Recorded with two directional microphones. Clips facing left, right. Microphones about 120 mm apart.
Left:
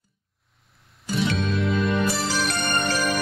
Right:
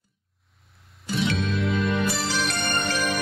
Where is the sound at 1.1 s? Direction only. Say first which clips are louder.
Left 1 dB; centre (ahead or behind).